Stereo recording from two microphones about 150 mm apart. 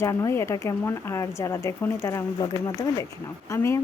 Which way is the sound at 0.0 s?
20° left (ahead or behind).